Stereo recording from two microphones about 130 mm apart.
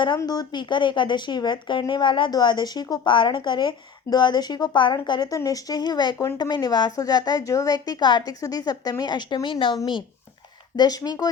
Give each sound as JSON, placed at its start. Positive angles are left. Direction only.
{"t": 0.2, "sound": "a woman's voice", "side_deg": 30}
{"t": 10.8, "sound": "a woman's voice", "side_deg": 30}